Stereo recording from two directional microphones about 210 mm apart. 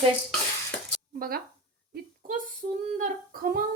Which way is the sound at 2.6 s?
35° right (ahead or behind).